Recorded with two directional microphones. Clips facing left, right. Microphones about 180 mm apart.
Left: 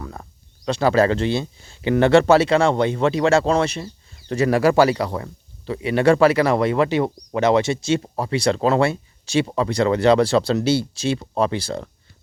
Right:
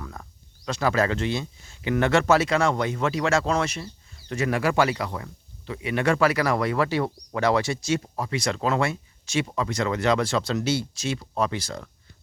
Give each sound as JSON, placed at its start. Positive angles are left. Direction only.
{"t": 0.0, "sound": "speech", "side_deg": 30}